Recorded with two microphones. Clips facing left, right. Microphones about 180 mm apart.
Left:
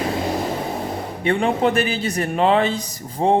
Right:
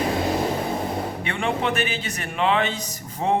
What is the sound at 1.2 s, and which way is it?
A man's voice, 35° left (ahead or behind).